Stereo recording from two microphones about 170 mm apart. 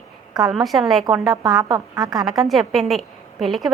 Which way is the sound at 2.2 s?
Centre (ahead or behind).